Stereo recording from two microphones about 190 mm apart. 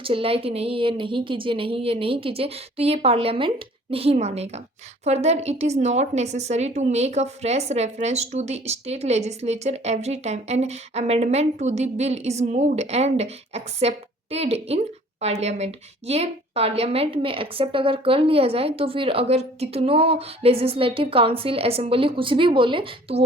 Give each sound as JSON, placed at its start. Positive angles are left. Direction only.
{"t": 0.0, "sound": "a woman's voice", "side_deg": -30}